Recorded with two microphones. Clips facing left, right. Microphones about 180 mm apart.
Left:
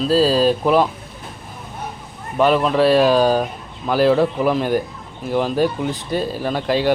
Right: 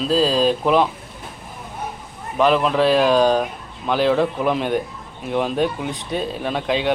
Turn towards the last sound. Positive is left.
turn(degrees=0)  # may be behind; listen again after turning